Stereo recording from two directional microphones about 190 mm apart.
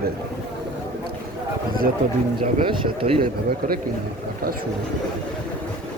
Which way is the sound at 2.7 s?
30° right (ahead or behind).